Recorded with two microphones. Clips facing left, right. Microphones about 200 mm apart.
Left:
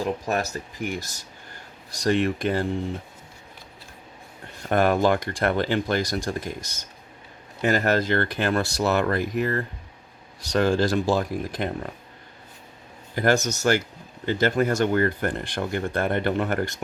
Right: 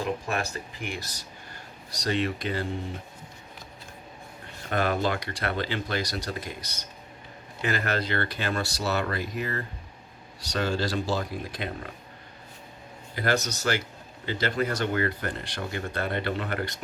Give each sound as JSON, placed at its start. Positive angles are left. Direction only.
{"t": 0.3, "sound": "speech", "side_deg": 40}
{"t": 4.7, "sound": "speech", "side_deg": 50}
{"t": 13.1, "sound": "speech", "side_deg": 50}